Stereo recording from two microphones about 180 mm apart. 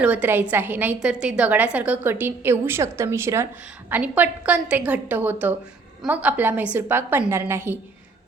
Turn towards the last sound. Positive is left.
turn(degrees=-15)  # may be behind; listen again after turning